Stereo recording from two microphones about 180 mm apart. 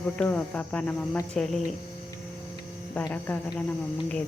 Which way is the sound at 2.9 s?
10° left (ahead or behind).